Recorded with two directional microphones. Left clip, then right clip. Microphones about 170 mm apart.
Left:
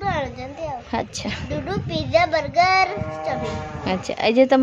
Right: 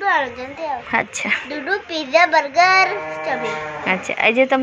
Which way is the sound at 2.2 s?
25° left (ahead or behind).